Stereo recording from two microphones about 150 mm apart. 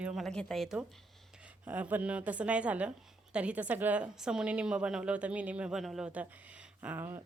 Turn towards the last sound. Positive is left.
turn(degrees=-15)  # may be behind; listen again after turning